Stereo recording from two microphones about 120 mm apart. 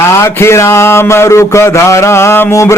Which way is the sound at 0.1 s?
20° left (ahead or behind).